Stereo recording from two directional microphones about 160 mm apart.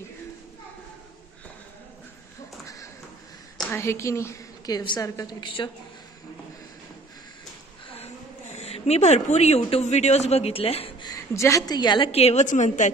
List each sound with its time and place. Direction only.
2.6 s tap: 20° left (ahead or behind)
3.7 s a woman's voice: 15° left (ahead or behind)
8.5 s a woman's voice: 40° left (ahead or behind)
11.1 s a woman's voice: 20° left (ahead or behind)
12.1 s a woman's voice: 40° left (ahead or behind)